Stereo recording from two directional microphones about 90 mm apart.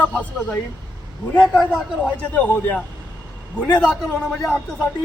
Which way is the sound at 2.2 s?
15° left (ahead or behind).